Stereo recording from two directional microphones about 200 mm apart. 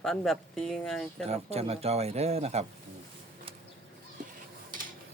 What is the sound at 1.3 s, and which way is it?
Speech, 30° right (ahead or behind).